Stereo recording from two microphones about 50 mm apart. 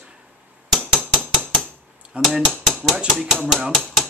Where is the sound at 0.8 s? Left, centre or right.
Centre.